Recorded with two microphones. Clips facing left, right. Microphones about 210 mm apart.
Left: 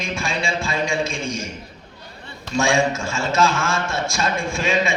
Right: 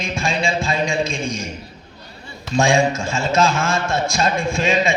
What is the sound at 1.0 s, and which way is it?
Speech, 15° right (ahead or behind).